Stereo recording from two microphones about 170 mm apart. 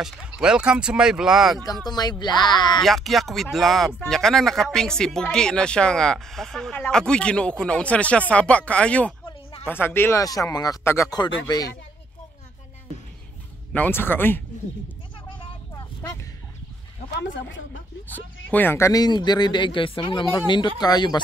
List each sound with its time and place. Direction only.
0.0 s speech: 5° right (ahead or behind)
1.9 s speech: 25° left (ahead or behind)
2.8 s speech: centre (ahead or behind)
9.2 s a sound: 35° left (ahead or behind)
9.7 s speech: 10° left (ahead or behind)
13.7 s speech: 10° left (ahead or behind)
15.2 s vehicle: 30° left (ahead or behind)
17.2 s speech: 90° left
18.1 s speech: 10° left (ahead or behind)